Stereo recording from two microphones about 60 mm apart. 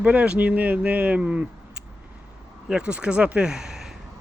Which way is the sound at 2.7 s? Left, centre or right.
Centre.